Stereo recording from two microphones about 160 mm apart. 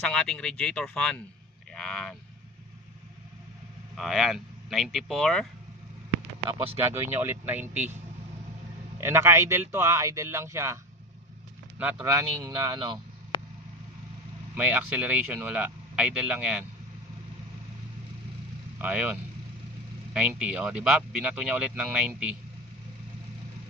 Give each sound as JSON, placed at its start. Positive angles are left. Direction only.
{"t": 0.0, "sound": "speech", "side_deg": 5}
{"t": 3.9, "sound": "speech", "side_deg": 0}
{"t": 6.8, "sound": "speech", "side_deg": -15}
{"t": 11.8, "sound": "speech", "side_deg": -15}
{"t": 13.3, "sound": "vehicle", "side_deg": 30}
{"t": 14.5, "sound": "speech", "side_deg": -10}
{"t": 18.8, "sound": "speech", "side_deg": -10}